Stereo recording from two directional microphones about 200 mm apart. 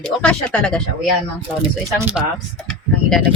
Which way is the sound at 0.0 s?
5° left (ahead or behind).